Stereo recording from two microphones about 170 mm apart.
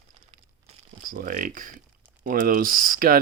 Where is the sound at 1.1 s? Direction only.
55° right (ahead or behind).